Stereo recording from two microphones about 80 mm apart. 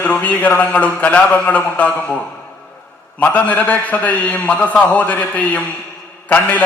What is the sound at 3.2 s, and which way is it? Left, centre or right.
A man's voice, centre.